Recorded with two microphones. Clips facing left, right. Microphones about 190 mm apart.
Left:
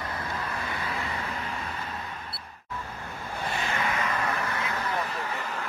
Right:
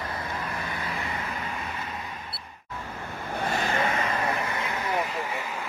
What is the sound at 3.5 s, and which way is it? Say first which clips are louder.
Vehicle: right 3 dB; 40° right (ahead or behind).